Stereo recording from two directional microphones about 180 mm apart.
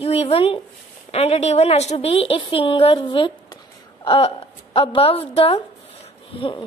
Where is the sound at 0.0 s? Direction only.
35° left (ahead or behind).